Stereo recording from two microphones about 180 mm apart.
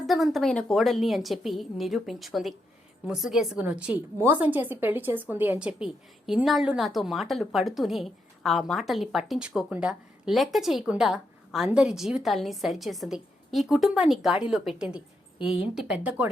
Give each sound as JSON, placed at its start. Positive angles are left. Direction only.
{"t": 0.1, "sound": "a woman's voice", "side_deg": 0}